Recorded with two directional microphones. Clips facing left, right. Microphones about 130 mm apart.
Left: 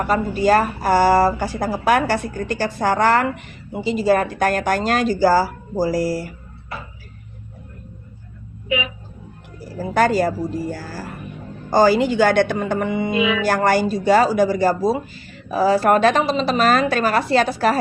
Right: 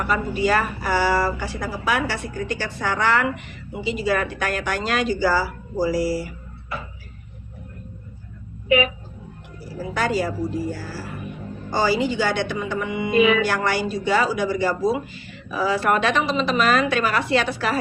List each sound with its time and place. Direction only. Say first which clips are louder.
0.0 s a woman's voice: left 4 dB; 40° left (ahead or behind)
9.7 s speech: left 6 dB; 45° left (ahead or behind)
13.1 s speech: right 5 dB; 50° right (ahead or behind)
13.4 s a woman's voice: left 5 dB; 45° left (ahead or behind)